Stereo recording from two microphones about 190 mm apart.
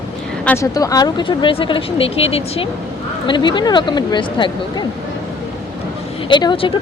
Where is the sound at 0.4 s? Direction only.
15° left (ahead or behind).